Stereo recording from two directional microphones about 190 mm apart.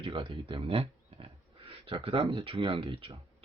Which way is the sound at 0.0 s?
25° right (ahead or behind).